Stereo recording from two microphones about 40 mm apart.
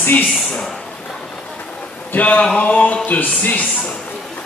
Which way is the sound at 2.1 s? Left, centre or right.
Left.